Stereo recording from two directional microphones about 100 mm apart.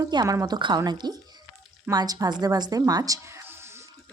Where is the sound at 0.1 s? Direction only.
45° right (ahead or behind); by 3.7 s 25° right (ahead or behind).